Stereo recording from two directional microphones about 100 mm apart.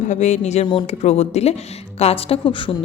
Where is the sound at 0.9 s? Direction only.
90° left.